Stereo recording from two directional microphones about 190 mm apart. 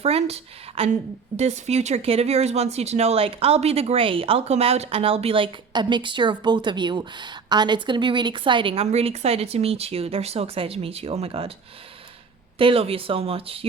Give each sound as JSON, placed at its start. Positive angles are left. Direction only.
{"t": 0.0, "sound": "speech", "side_deg": -30}
{"t": 12.5, "sound": "speech", "side_deg": -30}